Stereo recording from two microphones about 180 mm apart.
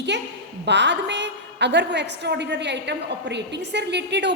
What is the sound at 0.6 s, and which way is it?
A woman's voice, 75° right (ahead or behind).